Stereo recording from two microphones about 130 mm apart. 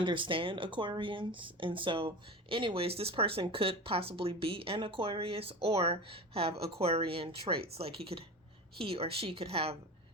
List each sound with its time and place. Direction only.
0.0 s speech: 40° right (ahead or behind)